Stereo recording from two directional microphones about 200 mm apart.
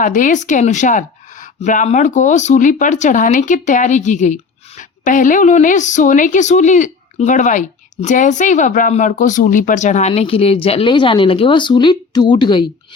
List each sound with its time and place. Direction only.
0.0 s speech: 40° left (ahead or behind); by 12.6 s 25° left (ahead or behind)